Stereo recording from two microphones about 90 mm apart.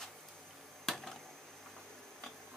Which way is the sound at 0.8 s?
5° left (ahead or behind).